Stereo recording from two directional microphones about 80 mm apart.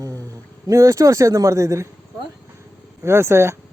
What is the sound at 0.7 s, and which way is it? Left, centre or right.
Speech, right.